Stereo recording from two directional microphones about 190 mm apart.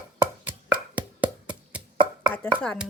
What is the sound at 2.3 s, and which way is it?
Speech, 5° left (ahead or behind).